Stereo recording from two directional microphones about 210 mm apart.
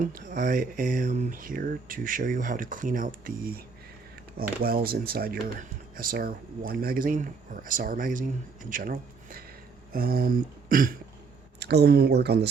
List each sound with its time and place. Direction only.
0.0 s speech: 40° right (ahead or behind)
9.9 s throat clearing: 45° right (ahead or behind)
11.6 s speech: 50° right (ahead or behind)